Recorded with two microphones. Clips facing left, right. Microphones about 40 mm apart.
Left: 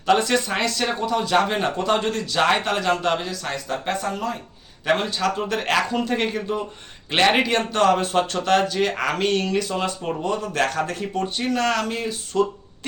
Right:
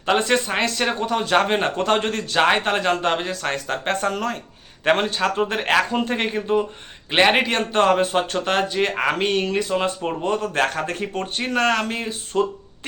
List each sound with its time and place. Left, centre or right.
0.0 s speech: right
1.0 s speech: right
4.9 s speech: right
7.1 s speech: centre
10.2 s speech: right